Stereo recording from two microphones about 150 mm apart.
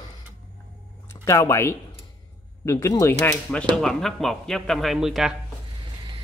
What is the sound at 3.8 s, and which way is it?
Speech, centre (ahead or behind).